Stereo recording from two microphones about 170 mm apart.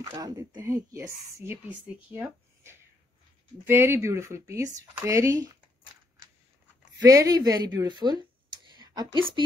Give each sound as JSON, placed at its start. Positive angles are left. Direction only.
{"t": 0.0, "sound": "a woman's voice", "side_deg": -20}
{"t": 7.0, "sound": "speech", "side_deg": -20}